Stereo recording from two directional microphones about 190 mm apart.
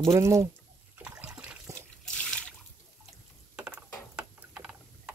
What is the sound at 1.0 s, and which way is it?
Water, 10° right (ahead or behind).